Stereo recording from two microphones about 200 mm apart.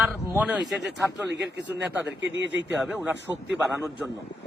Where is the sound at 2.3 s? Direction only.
65° right (ahead or behind).